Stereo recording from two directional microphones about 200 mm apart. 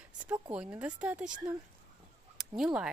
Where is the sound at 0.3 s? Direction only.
5° right (ahead or behind).